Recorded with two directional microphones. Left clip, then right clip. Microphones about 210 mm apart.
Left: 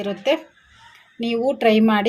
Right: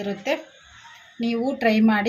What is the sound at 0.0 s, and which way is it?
A woman's voice, 25° left (ahead or behind).